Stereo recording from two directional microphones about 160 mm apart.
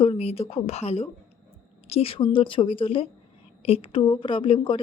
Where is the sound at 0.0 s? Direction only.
35° left (ahead or behind).